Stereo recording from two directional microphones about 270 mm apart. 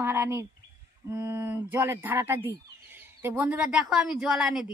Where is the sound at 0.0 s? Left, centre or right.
Centre.